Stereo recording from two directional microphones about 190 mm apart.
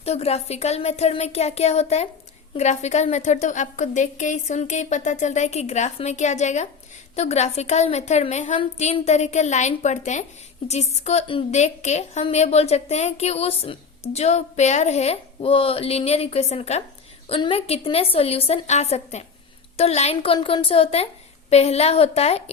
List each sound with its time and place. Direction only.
0.0 s a woman's voice: 35° left (ahead or behind)